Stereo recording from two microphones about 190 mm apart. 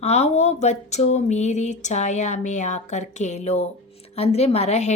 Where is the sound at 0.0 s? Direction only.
35° left (ahead or behind).